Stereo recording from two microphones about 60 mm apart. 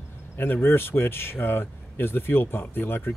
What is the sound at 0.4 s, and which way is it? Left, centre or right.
Speech, left.